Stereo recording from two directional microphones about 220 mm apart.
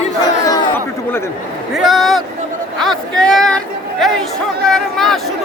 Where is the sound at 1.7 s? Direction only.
Centre (ahead or behind).